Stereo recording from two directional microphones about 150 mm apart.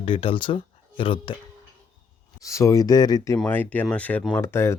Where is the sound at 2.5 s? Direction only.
20° left (ahead or behind).